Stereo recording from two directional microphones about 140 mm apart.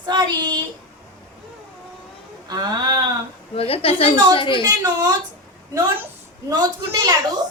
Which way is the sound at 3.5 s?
45° left (ahead or behind).